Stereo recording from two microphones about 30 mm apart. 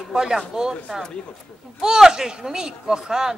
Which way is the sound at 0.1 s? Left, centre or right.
Centre.